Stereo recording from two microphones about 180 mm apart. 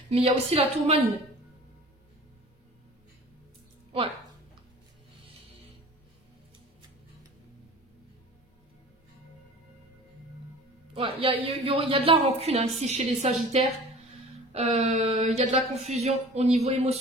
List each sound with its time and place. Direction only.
0.1 s a woman's voice: 35° right (ahead or behind)
11.0 s a woman's voice: 30° right (ahead or behind)